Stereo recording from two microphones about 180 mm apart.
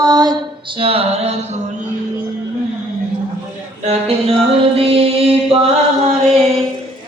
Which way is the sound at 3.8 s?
35° right (ahead or behind).